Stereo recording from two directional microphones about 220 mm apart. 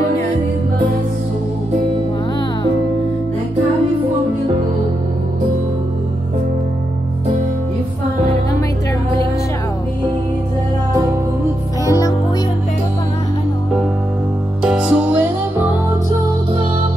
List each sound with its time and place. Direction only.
11.8 s music: 15° left (ahead or behind)
14.6 s music: 5° right (ahead or behind)